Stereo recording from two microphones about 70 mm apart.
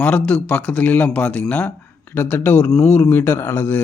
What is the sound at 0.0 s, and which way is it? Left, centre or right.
A man's voice, centre.